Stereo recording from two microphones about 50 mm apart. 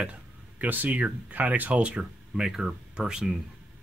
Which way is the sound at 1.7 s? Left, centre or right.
Right.